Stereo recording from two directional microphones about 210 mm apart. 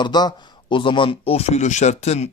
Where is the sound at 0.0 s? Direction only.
20° left (ahead or behind).